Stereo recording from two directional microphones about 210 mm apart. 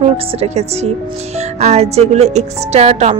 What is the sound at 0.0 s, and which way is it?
A woman's voice, 30° right (ahead or behind).